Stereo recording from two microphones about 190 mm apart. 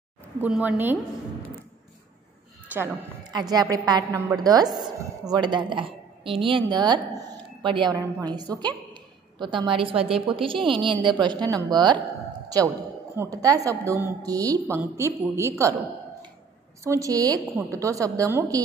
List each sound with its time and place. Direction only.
0.4 s a woman's voice: 5° right (ahead or behind)
2.7 s speech: 10° right (ahead or behind)
3.3 s a woman's voice: 20° right (ahead or behind)
13.1 s a woman's voice: 15° right (ahead or behind)
16.8 s a woman's voice: 15° right (ahead or behind)